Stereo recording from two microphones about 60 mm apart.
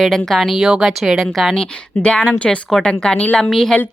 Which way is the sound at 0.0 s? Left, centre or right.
Centre.